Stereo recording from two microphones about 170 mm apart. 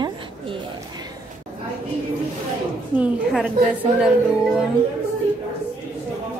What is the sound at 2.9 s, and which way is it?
Speech, 5° right (ahead or behind).